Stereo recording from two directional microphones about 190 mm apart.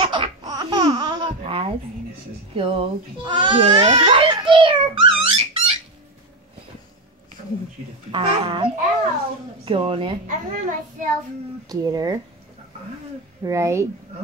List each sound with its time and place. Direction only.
0.0 s laughter: 30° right (ahead or behind)
2.5 s speech: 30° right (ahead or behind)
8.1 s a child's voice: 25° right (ahead or behind)
10.2 s a child's voice: 45° right (ahead or behind)
11.7 s a child's voice: 20° right (ahead or behind)
13.4 s speech: 15° right (ahead or behind)